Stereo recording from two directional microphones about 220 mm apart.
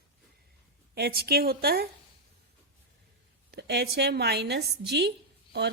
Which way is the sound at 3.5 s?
50° right (ahead or behind).